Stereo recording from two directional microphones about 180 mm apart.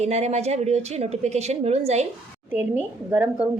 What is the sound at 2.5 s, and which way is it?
Speech, 10° right (ahead or behind).